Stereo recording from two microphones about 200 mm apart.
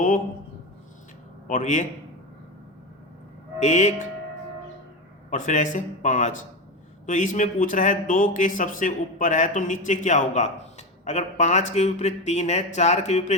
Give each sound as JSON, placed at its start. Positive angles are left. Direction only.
{"t": 1.5, "sound": "speech", "side_deg": 40}
{"t": 3.6, "sound": "speech", "side_deg": 35}
{"t": 5.3, "sound": "speech", "side_deg": 40}